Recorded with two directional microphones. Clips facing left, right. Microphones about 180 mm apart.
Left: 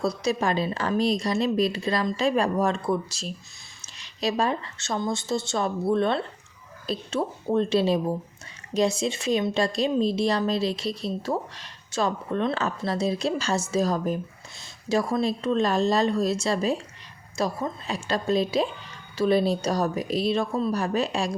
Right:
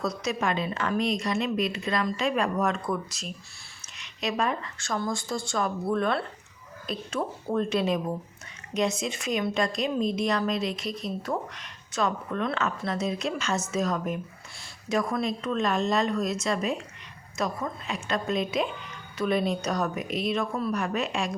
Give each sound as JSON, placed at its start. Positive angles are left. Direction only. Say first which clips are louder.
{"t": 0.0, "sound": "speech", "louder": "left 4 dB", "side_deg": 30}